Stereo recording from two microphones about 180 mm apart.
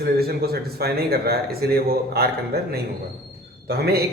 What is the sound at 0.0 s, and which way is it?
A man's voice, 60° right (ahead or behind).